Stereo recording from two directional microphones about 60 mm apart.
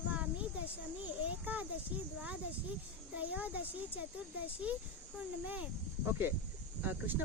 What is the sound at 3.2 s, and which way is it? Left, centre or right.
Speech, right.